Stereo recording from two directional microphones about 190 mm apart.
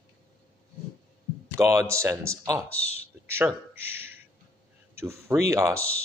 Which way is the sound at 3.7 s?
10° right (ahead or behind).